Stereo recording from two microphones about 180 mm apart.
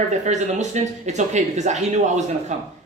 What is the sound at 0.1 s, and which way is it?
A man's voice, 40° right (ahead or behind).